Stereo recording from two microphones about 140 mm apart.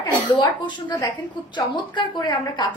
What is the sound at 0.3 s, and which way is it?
A woman's voice, 30° left (ahead or behind).